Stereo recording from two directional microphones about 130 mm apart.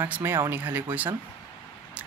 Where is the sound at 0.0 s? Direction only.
15° right (ahead or behind).